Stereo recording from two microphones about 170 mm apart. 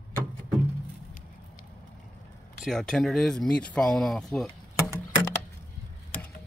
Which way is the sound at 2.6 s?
5° left (ahead or behind).